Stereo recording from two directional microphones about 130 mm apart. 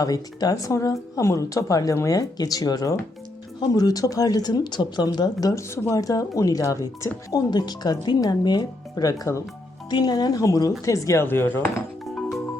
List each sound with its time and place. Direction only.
0.0 s speech: 30° left (ahead or behind)